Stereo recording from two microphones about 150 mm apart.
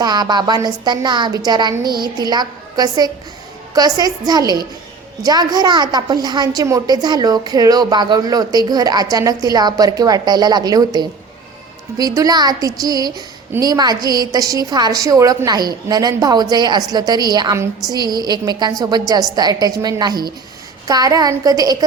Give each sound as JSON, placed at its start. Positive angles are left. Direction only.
{"t": 0.0, "sound": "a woman's voice", "side_deg": -25}